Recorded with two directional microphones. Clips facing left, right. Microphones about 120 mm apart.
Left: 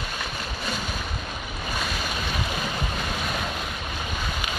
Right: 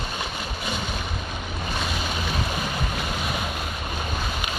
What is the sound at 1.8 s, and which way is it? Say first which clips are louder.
Boat: right 1 dB; centre (ahead or behind).